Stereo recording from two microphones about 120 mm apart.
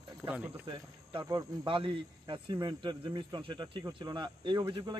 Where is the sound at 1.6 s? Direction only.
45° right (ahead or behind).